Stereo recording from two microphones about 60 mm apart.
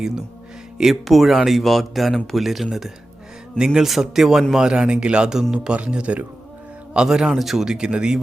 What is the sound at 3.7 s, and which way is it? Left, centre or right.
A man's voice, centre.